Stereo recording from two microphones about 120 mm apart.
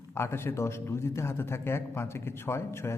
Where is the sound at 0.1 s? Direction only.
20° left (ahead or behind).